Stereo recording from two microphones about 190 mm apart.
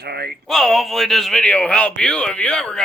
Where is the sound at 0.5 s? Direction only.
Centre (ahead or behind).